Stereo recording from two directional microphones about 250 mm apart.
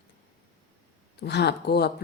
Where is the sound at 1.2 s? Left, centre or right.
Left.